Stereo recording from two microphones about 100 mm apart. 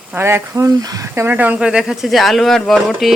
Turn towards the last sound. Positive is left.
turn(degrees=0)  # may be behind; listen again after turning